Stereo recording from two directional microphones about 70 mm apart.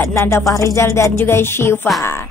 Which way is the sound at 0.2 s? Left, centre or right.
Left.